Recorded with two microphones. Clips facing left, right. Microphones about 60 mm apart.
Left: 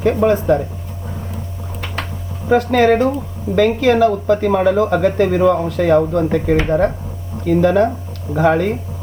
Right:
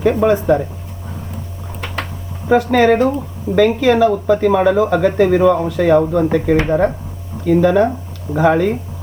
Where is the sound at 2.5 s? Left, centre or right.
Centre.